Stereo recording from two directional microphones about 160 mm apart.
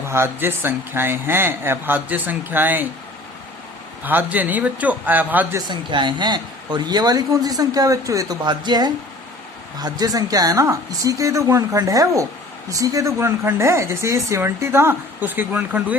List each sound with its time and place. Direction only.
0.1 s speech: 15° right (ahead or behind)
4.0 s speech: 10° right (ahead or behind)
5.5 s speech: 30° right (ahead or behind); by 16.0 s 10° right (ahead or behind)